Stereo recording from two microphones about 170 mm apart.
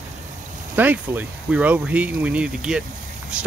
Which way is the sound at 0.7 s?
10° right (ahead or behind).